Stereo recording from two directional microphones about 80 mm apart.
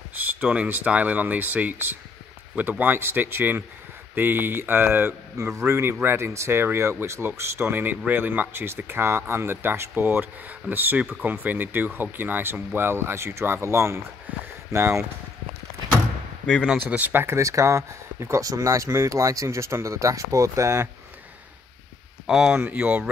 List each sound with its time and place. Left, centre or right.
0.1 s speech: centre; by 14.0 s right
14.3 s speech: right
14.7 s speech: right
16.7 s speech: right
17.4 s speech: right
22.2 s speech: centre